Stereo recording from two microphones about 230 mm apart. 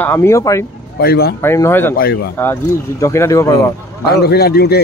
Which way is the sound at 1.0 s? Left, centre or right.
Left.